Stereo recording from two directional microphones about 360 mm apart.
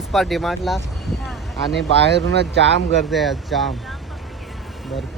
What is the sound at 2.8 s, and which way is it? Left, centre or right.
Speech, centre.